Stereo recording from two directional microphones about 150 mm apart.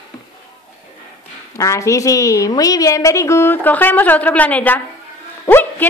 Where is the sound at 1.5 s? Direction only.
20° left (ahead or behind).